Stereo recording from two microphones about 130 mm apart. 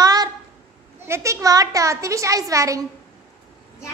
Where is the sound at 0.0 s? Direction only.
30° right (ahead or behind).